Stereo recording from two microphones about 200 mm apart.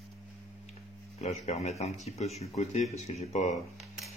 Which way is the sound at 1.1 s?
30° left (ahead or behind).